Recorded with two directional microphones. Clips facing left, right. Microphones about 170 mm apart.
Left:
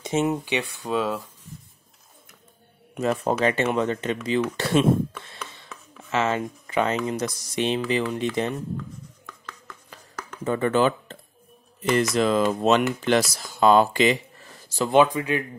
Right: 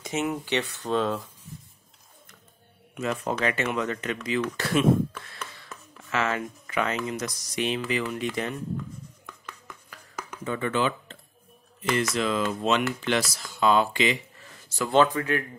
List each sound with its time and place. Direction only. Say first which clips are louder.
0.0 s speech: left 5 dB; 25° left (ahead or behind)
0.5 s speech: even; 10° left (ahead or behind)
2.9 s speech: left 5 dB; 40° left (ahead or behind)
5.2 s a sound: left 1 dB; 25° left (ahead or behind)
6.0 s speech: left 4 dB; 25° left (ahead or behind)
10.4 s speech: left 6 dB; 40° left (ahead or behind)
14.9 s speech: left 2 dB; 15° left (ahead or behind)